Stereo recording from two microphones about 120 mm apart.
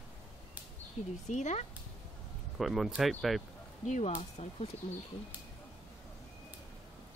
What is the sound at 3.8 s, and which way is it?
Speech, 80° left.